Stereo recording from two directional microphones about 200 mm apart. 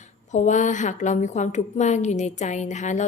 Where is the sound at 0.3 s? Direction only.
35° left (ahead or behind).